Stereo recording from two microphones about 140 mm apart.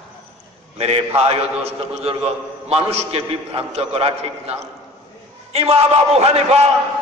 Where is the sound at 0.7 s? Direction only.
45° right (ahead or behind).